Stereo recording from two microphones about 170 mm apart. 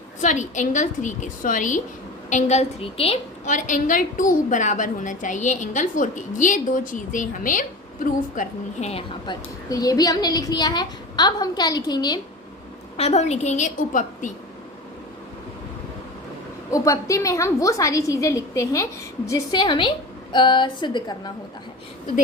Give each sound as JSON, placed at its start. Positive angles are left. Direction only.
{"t": 0.2, "sound": "a woman's voice", "side_deg": 45}
{"t": 8.4, "sound": "a woman's voice", "side_deg": 40}
{"t": 13.0, "sound": "a woman's voice", "side_deg": 40}
{"t": 16.7, "sound": "a woman's voice", "side_deg": 20}